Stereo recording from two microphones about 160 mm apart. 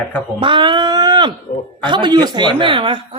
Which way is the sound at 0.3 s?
30° right (ahead or behind).